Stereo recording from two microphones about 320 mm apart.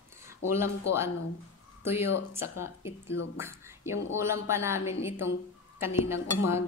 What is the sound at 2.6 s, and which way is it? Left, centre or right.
A woman's voice, centre.